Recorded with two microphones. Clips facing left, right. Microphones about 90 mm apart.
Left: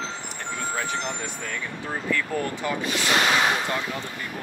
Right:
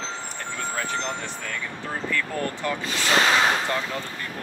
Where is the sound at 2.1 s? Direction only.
15° left (ahead or behind).